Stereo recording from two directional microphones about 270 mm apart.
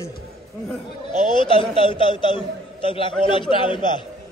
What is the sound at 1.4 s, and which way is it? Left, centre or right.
A man's voice, centre.